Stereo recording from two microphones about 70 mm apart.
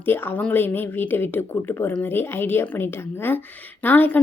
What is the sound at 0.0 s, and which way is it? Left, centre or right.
A woman's voice, left.